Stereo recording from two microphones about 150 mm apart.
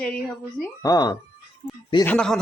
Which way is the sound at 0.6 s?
25° left (ahead or behind).